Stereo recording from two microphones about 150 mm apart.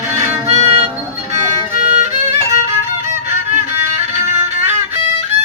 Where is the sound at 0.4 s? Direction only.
45° right (ahead or behind).